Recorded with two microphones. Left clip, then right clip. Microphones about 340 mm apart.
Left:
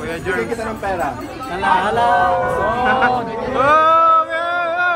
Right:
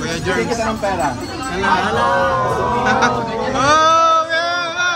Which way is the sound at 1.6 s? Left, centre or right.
Centre.